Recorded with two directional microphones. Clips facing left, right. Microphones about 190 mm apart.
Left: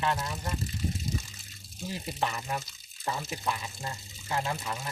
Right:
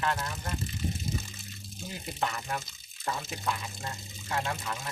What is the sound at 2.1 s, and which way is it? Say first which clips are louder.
Speech: even; 15° left (ahead or behind).